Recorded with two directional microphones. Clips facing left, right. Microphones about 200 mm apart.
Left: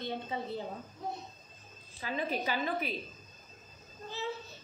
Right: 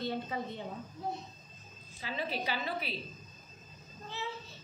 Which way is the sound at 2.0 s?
45° left (ahead or behind).